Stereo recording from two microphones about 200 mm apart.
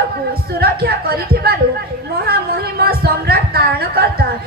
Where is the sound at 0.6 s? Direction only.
50° right (ahead or behind).